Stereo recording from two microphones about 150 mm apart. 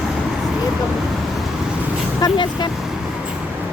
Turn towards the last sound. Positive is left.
turn(degrees=30)  # may be behind; listen again after turning